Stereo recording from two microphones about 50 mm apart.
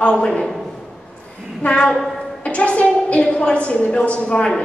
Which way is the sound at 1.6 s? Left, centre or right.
Left.